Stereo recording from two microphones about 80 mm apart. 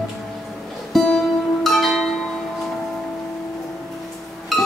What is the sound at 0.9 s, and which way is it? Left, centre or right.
Music, centre.